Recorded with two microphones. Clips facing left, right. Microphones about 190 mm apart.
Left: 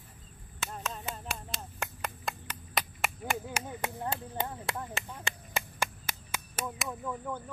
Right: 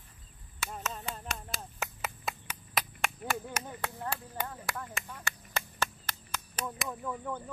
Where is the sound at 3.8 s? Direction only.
20° left (ahead or behind).